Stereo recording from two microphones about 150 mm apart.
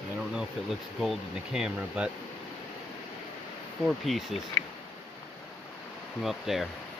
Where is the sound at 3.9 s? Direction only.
Centre (ahead or behind).